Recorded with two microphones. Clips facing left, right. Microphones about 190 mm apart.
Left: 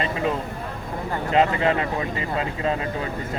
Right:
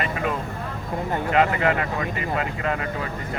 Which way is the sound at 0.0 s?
25° left (ahead or behind).